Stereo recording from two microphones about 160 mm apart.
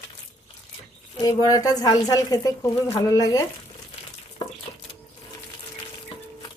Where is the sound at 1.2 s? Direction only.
20° left (ahead or behind).